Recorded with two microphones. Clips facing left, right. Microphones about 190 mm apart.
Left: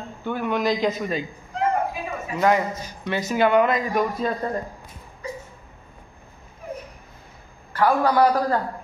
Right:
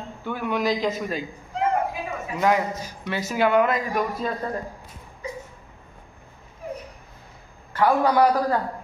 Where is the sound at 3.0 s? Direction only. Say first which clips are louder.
Left 2 dB; 5° right (ahead or behind).